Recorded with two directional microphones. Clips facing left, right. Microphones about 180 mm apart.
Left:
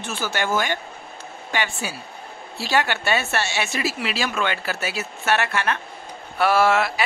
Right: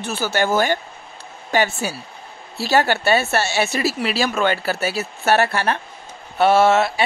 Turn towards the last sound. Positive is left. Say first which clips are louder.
# right 4 dB
turn(degrees=-25)  # may be behind; listen again after turning